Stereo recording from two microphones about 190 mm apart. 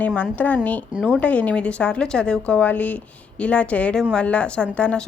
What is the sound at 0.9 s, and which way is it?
Speech, 5° right (ahead or behind).